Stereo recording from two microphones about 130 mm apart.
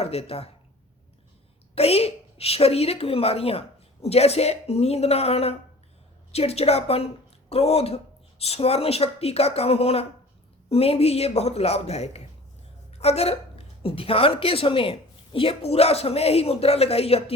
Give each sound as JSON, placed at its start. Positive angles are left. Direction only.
{"t": 0.0, "sound": "a woman's voice", "side_deg": 50}
{"t": 1.7, "sound": "a woman's voice", "side_deg": 50}